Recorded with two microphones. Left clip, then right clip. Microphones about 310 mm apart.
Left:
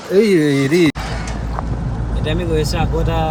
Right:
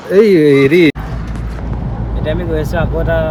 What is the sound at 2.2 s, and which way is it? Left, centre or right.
Speech, centre.